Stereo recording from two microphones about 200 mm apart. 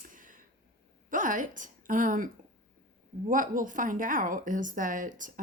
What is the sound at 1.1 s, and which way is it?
A woman's voice, 40° right (ahead or behind).